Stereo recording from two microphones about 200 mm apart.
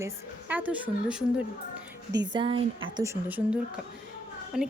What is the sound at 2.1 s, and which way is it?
A woman's voice, 25° right (ahead or behind).